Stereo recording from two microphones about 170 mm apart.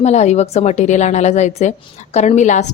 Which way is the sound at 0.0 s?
40° left (ahead or behind).